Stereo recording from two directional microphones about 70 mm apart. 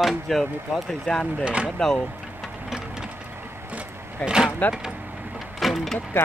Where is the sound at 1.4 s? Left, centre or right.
Centre.